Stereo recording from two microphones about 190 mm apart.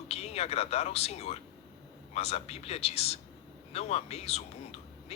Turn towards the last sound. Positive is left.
turn(degrees=35)  # may be behind; listen again after turning